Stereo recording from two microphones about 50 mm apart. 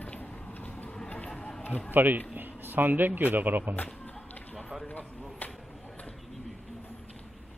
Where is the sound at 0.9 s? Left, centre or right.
Left.